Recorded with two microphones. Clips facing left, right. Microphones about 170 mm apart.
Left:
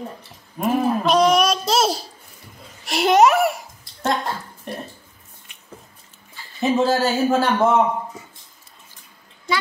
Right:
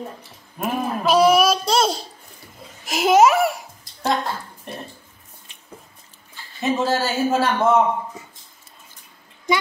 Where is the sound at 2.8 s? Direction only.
Centre (ahead or behind).